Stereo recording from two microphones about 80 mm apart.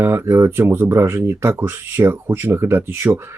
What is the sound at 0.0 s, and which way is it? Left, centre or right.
Speech, right.